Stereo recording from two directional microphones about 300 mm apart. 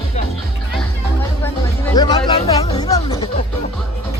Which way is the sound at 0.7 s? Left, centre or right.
Centre.